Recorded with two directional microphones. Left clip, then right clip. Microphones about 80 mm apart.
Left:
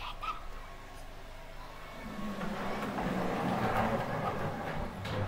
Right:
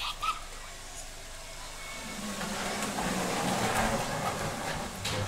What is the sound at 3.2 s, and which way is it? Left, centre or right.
Vehicle, centre.